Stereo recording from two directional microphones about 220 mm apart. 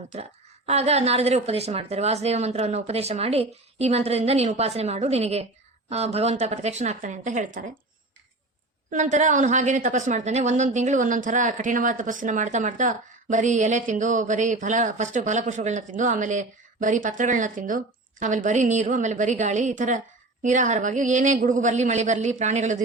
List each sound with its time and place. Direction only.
0.1 s a woman's voice: 30° right (ahead or behind)
8.9 s a woman's voice: 35° right (ahead or behind)